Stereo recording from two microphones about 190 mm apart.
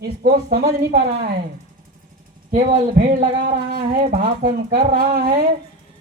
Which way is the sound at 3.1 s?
50° right (ahead or behind).